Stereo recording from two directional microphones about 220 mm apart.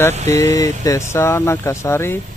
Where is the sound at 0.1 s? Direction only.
30° right (ahead or behind).